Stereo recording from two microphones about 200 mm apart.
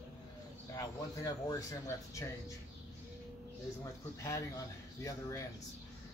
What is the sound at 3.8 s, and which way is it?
Speech, 15° left (ahead or behind).